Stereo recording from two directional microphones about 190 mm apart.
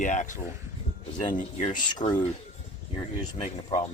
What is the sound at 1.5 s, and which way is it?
Speech, 30° left (ahead or behind).